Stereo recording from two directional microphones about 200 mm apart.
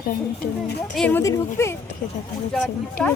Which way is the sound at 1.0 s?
10° left (ahead or behind).